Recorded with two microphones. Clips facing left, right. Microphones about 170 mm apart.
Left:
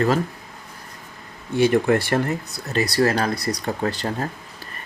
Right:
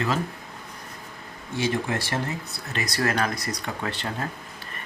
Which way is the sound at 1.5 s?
60° left (ahead or behind).